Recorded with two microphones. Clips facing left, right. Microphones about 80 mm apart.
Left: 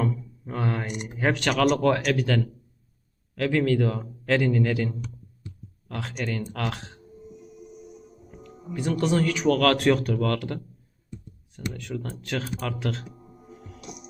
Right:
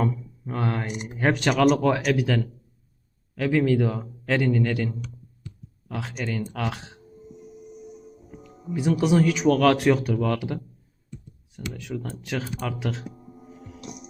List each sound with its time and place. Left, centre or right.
0.5 s speech: centre
12.2 s music: centre